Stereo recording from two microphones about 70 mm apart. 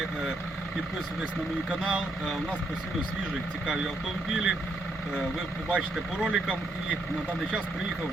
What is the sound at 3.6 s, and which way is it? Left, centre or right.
Speech, centre.